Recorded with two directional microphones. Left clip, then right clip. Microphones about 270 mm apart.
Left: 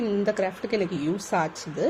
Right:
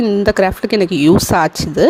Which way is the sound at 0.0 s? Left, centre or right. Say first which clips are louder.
Right 12 dB; right.